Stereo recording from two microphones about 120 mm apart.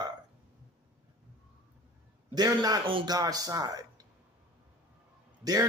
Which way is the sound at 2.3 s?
35° right (ahead or behind).